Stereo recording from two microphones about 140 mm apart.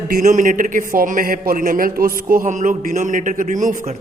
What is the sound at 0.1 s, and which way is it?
A man's voice, 65° right (ahead or behind).